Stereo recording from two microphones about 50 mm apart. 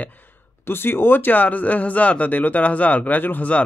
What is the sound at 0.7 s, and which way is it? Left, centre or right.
Speech, left.